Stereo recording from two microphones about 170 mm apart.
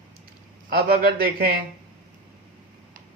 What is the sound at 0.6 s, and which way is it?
Speech, 70° right (ahead or behind).